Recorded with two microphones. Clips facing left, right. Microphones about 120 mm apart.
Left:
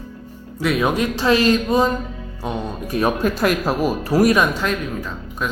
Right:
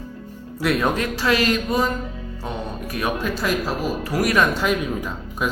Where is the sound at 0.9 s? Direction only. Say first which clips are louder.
Left 3 dB; 20° left (ahead or behind).